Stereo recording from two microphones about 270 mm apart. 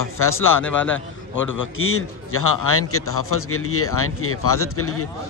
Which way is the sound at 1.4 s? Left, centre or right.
Left.